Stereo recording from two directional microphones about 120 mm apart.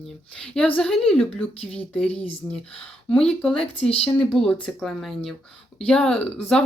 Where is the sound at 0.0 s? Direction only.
5° left (ahead or behind).